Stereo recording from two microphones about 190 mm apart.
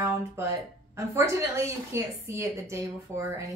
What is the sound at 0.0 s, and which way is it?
A woman's voice, 15° right (ahead or behind).